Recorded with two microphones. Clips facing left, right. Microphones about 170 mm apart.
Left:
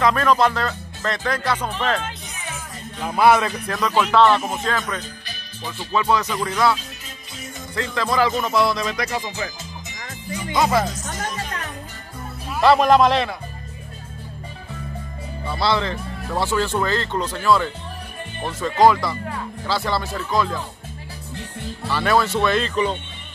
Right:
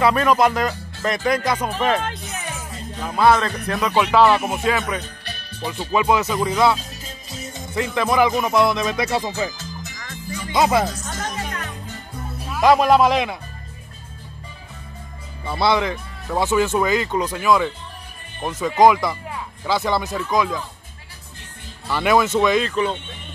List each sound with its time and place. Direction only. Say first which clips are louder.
0.0 s speech: right 1 dB; 10° right (ahead or behind)
3.0 s speech: left 1 dB; 10° left (ahead or behind)
3.6 s speech: right 1 dB; 5° right (ahead or behind)
7.7 s speech: right 3 dB; 15° right (ahead or behind)
10.5 s speech: right 2 dB; 20° right (ahead or behind)
12.6 s speech: even; 10° right (ahead or behind)
15.4 s speech: right 2 dB; 20° right (ahead or behind)
18.8 s speech: right 1 dB; 20° right (ahead or behind)
21.9 s speech: right 2 dB; 20° right (ahead or behind)